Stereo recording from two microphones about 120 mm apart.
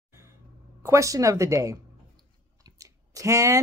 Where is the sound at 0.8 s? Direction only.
25° right (ahead or behind).